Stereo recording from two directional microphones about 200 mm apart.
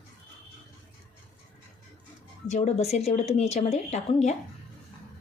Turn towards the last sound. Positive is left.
turn(degrees=35)  # may be behind; listen again after turning